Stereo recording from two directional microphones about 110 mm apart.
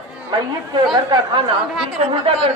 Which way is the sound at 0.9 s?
40° right (ahead or behind).